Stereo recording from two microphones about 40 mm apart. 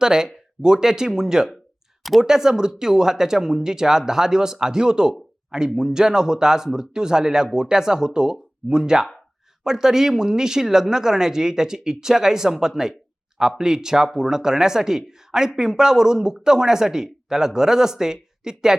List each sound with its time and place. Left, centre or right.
0.0 s speech: centre